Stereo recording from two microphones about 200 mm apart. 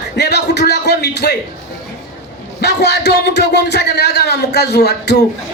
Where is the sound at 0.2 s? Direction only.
55° left (ahead or behind).